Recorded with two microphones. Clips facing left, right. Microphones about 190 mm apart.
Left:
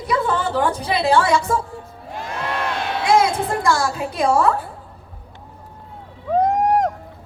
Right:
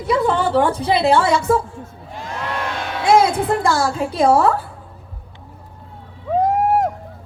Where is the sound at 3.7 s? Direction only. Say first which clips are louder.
Right 2 dB; 30° right (ahead or behind).